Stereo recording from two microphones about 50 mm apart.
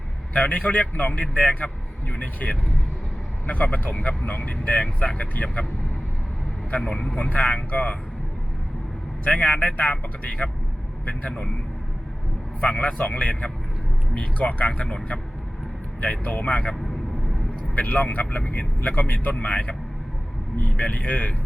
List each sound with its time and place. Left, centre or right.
0.3 s speech: left
6.7 s speech: left
9.2 s speech: left
12.5 s a man's voice: left
17.7 s speech: left